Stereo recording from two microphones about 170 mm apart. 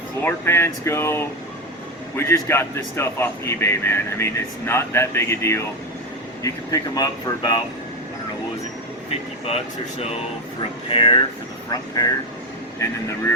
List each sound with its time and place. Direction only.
0.2 s speech: 15° left (ahead or behind)
10.8 s speech: 30° left (ahead or behind)